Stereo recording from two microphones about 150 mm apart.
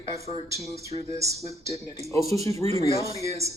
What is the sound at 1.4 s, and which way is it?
Speech, 45° right (ahead or behind).